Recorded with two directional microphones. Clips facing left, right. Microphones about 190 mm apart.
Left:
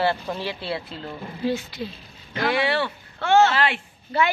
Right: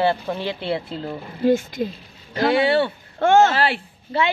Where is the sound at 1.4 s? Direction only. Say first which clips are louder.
Right 8 dB; 50° right (ahead or behind).